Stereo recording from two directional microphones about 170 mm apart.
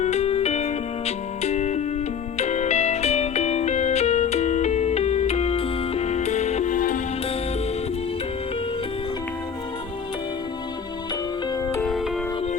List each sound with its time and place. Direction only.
0.0 s music: 40° left (ahead or behind)
11.8 s music: centre (ahead or behind)